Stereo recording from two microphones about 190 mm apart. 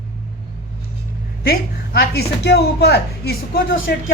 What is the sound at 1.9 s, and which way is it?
A woman's voice, 55° left (ahead or behind).